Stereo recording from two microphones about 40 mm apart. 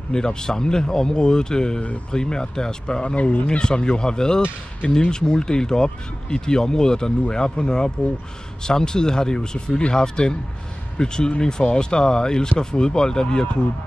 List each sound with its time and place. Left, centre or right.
0.1 s speech: centre
3.2 s speech: left
3.4 s speech: left